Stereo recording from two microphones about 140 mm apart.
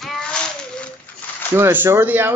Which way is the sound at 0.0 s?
5° left (ahead or behind).